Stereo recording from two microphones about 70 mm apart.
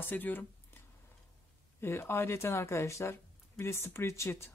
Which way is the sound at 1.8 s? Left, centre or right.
Left.